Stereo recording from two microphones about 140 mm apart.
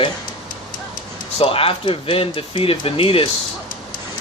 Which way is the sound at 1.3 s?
40° left (ahead or behind).